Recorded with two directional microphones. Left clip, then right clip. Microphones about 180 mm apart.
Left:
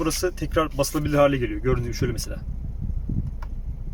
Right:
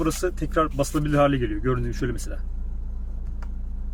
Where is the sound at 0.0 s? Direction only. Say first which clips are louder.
Even; 10° left (ahead or behind).